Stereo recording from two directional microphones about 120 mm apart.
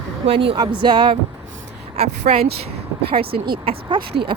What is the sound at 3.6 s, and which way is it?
Speech, 45° right (ahead or behind).